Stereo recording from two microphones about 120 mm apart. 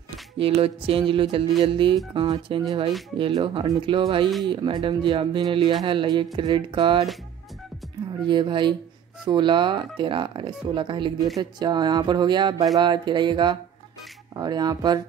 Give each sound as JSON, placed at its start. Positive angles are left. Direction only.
{"t": 0.4, "sound": "speech", "side_deg": -50}
{"t": 8.3, "sound": "speech", "side_deg": -40}